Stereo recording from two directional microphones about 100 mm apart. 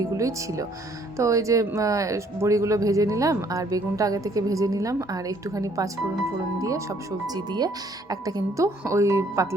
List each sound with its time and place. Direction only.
0.0 s speech: 35° right (ahead or behind)
7.3 s speech: 45° right (ahead or behind)
8.1 s speech: 30° right (ahead or behind)